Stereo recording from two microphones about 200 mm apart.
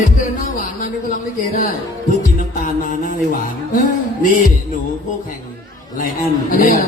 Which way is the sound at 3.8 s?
45° left (ahead or behind).